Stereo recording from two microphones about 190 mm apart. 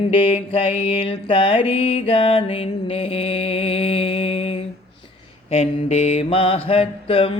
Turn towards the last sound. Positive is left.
turn(degrees=30)  # may be behind; listen again after turning